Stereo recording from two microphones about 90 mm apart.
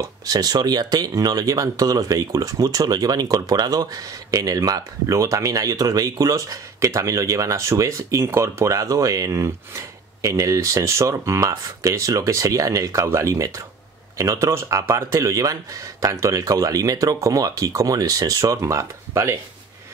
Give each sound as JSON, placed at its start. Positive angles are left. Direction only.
{"t": 0.0, "sound": "speech", "side_deg": -45}